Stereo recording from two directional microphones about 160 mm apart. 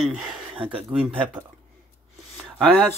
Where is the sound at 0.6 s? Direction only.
10° right (ahead or behind).